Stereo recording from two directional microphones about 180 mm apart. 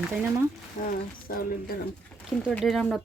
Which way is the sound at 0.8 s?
50° left (ahead or behind).